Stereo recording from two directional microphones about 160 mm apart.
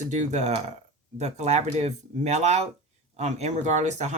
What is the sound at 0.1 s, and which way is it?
Speech, 45° right (ahead or behind).